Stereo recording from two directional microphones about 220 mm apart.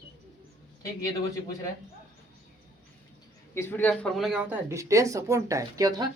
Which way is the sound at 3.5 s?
10° left (ahead or behind).